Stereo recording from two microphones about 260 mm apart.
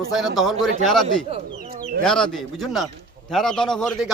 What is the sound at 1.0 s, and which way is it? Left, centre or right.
Speech, right.